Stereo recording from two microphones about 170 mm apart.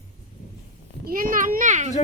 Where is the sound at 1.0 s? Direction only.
55° right (ahead or behind).